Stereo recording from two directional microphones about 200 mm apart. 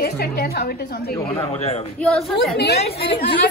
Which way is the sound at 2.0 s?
5° left (ahead or behind).